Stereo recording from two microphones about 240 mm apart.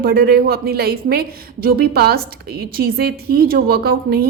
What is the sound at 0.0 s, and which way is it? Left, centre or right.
A woman's voice, right.